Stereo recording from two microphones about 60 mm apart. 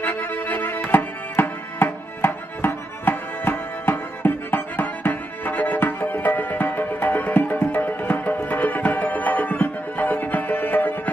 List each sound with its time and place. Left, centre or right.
0.0 s music: left